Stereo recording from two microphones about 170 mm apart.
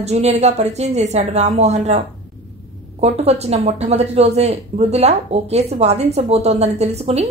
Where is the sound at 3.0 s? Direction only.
35° right (ahead or behind).